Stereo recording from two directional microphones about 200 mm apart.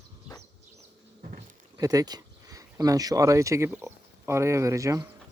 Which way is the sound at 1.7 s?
20° right (ahead or behind).